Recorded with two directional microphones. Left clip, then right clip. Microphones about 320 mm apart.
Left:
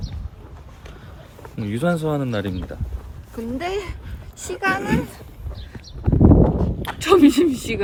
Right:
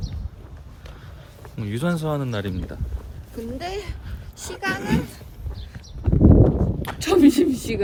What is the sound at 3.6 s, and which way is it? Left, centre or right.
Speech, centre.